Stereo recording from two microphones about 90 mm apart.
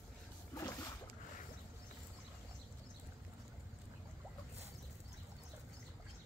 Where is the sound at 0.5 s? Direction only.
40° left (ahead or behind).